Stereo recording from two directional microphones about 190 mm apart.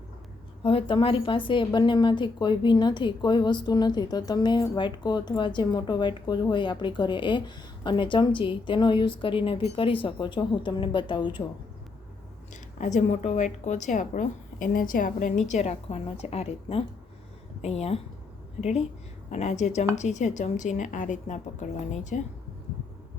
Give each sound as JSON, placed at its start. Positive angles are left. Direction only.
{"t": 0.6, "sound": "a woman's voice", "side_deg": 25}
{"t": 12.8, "sound": "a woman's voice", "side_deg": 40}